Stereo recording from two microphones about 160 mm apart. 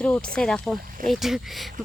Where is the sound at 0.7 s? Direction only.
60° right (ahead or behind).